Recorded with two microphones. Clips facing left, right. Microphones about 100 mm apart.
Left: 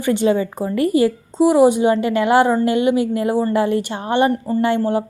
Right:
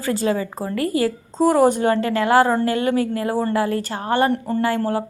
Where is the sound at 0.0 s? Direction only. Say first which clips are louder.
Left 4 dB; 25° left (ahead or behind).